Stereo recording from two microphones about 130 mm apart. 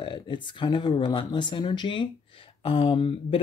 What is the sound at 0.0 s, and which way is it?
Speech, 35° left (ahead or behind).